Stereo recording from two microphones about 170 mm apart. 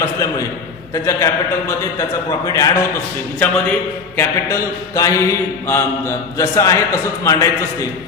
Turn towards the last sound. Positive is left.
turn(degrees=20)  # may be behind; listen again after turning